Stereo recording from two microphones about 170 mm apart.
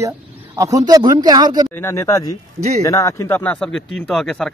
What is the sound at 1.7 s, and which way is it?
Speech, 15° left (ahead or behind).